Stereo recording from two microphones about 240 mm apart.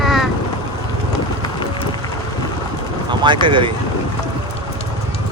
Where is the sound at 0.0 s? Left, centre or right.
Centre.